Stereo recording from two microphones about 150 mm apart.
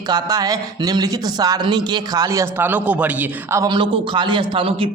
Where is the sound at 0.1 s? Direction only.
25° right (ahead or behind); by 3.6 s 10° right (ahead or behind).